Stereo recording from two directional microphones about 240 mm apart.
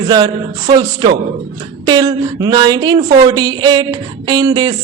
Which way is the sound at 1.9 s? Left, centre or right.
Centre.